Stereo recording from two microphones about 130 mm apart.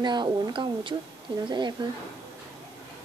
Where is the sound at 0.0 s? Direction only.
35° right (ahead or behind).